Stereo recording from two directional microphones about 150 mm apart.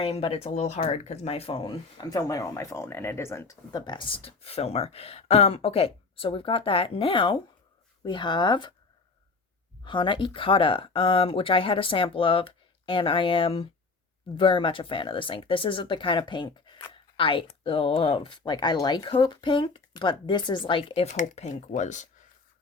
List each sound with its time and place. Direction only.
0.0 s speech: 40° left (ahead or behind)
9.8 s speech: 30° left (ahead or behind); by 22.0 s 55° left (ahead or behind)